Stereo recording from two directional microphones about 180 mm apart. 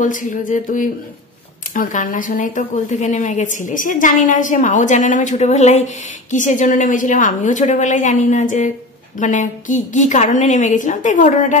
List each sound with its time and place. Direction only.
0.0 s speech: 45° left (ahead or behind)